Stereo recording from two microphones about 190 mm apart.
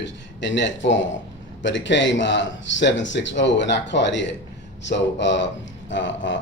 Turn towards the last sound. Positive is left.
turn(degrees=75)  # may be behind; listen again after turning